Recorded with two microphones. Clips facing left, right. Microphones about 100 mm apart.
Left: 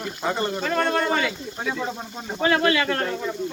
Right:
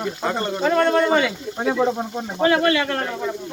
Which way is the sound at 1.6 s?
70° right (ahead or behind).